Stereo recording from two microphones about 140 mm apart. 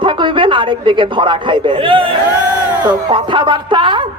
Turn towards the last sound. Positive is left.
turn(degrees=-35)  # may be behind; listen again after turning